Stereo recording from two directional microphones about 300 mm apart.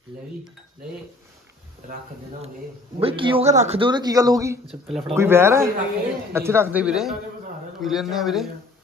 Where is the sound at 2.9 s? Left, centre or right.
Centre.